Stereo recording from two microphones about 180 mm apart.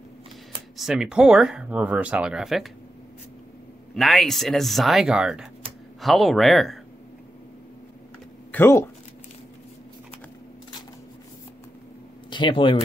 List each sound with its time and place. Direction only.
0.7 s speech: 5° right (ahead or behind)
3.9 s speech: centre (ahead or behind)
8.5 s speech: 10° left (ahead or behind)
12.3 s speech: 25° left (ahead or behind)